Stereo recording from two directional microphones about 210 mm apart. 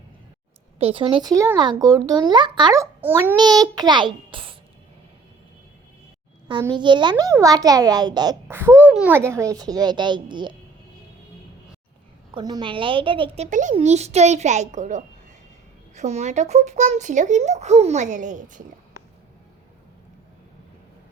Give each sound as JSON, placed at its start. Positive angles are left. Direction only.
{"t": 0.8, "sound": "a child's voice", "side_deg": -25}
{"t": 6.6, "sound": "a child's voice", "side_deg": -20}
{"t": 12.3, "sound": "speech", "side_deg": -20}